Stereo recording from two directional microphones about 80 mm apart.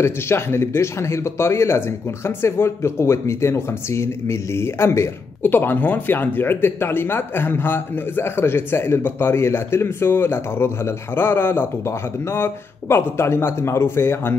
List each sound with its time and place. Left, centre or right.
0.0 s speech: left